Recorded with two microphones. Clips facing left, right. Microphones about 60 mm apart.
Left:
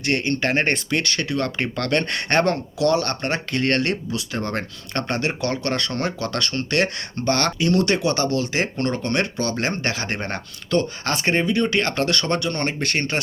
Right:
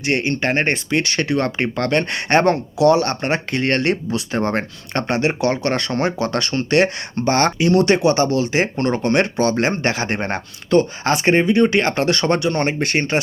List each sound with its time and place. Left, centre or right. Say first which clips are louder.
0.0 s speech: right 2 dB; centre
1.1 s speech: right 4 dB; right
1.6 s speech: right 3 dB; centre
3.8 s speech: right 5 dB; right